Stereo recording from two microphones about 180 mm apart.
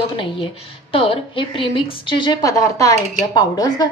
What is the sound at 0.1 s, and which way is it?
A woman's voice, 30° left (ahead or behind).